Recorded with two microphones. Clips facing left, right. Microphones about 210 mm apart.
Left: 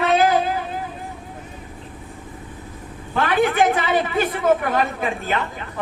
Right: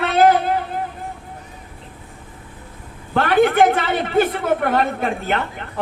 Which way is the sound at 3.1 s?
60° right (ahead or behind).